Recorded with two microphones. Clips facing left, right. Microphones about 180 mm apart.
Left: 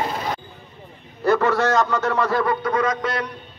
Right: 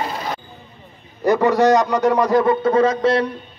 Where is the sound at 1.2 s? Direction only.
15° right (ahead or behind).